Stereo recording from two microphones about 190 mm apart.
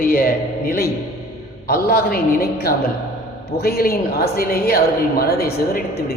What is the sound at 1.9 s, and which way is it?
A woman's voice, 55° left (ahead or behind).